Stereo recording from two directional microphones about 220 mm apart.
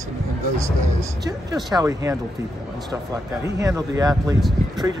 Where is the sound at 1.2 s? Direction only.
15° right (ahead or behind).